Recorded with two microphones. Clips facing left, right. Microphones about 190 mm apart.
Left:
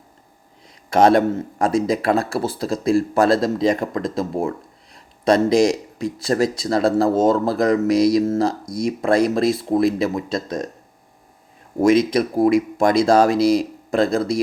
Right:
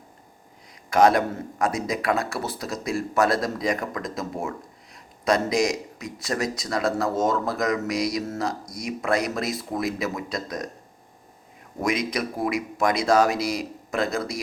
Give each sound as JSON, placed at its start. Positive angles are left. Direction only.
{"t": 0.9, "sound": "speech", "side_deg": 30}
{"t": 11.8, "sound": "speech", "side_deg": 30}